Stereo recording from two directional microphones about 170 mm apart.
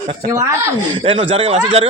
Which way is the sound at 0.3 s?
20° right (ahead or behind).